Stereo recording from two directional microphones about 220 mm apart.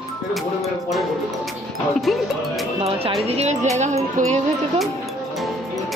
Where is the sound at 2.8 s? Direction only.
25° right (ahead or behind).